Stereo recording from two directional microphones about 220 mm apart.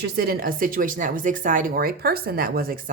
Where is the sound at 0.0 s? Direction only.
45° right (ahead or behind).